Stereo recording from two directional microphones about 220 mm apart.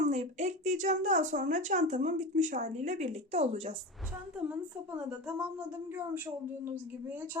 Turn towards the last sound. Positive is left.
turn(degrees=-10)  # may be behind; listen again after turning